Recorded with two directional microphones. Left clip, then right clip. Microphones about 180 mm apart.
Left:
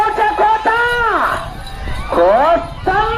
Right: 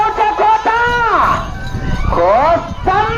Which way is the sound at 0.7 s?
50° left (ahead or behind).